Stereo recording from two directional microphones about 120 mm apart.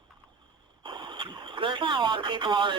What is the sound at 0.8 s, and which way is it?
Speech, 40° right (ahead or behind).